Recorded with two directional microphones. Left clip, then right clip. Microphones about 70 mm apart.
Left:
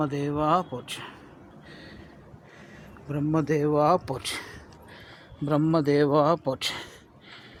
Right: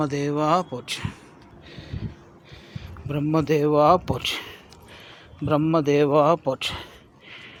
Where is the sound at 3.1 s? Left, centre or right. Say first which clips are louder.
Right 3 dB; right.